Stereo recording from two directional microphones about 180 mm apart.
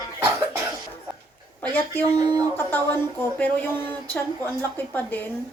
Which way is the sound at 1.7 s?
10° left (ahead or behind).